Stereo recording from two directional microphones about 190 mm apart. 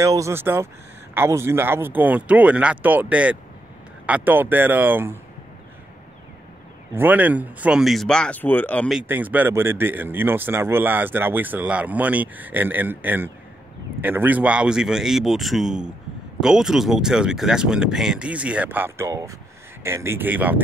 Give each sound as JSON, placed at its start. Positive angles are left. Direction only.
{"t": 0.0, "sound": "speech", "side_deg": -15}
{"t": 6.9, "sound": "speech", "side_deg": -10}
{"t": 9.0, "sound": "speech", "side_deg": -10}